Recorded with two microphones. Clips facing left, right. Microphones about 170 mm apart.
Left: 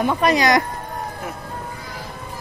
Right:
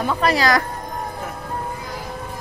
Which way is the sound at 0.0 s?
15° left (ahead or behind).